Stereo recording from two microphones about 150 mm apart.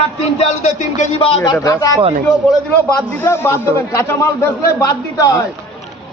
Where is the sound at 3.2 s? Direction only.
15° left (ahead or behind).